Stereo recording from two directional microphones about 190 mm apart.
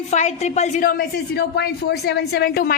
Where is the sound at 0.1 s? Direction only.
35° left (ahead or behind).